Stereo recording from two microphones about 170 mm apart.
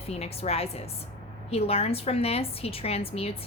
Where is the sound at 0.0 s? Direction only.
35° left (ahead or behind).